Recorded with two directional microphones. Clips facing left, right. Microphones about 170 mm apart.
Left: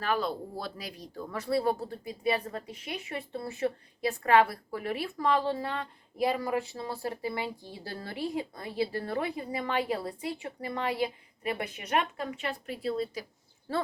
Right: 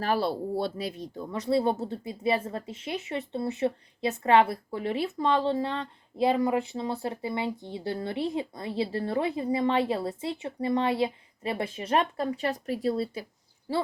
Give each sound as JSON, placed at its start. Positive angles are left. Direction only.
{"t": 0.0, "sound": "speech", "side_deg": -35}
{"t": 13.7, "sound": "speech", "side_deg": -15}